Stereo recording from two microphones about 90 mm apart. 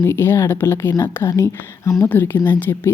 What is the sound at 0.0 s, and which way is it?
Speech, 25° left (ahead or behind).